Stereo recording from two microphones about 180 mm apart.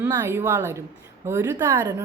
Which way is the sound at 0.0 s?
15° right (ahead or behind).